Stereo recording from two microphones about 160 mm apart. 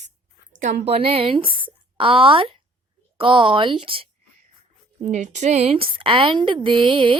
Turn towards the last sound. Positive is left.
turn(degrees=-35)  # may be behind; listen again after turning